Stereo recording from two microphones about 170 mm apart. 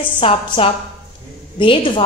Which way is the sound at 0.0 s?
30° left (ahead or behind).